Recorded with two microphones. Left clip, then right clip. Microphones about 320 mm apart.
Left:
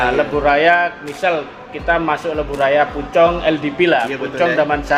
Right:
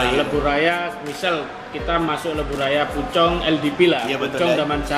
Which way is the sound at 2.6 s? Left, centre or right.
Centre.